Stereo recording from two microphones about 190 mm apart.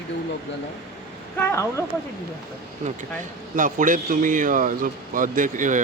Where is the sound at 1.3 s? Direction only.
10° left (ahead or behind).